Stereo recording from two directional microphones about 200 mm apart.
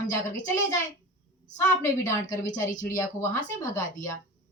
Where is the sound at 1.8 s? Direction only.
15° left (ahead or behind).